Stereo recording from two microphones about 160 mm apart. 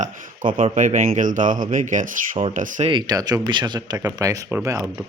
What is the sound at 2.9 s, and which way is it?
Speech, 30° right (ahead or behind).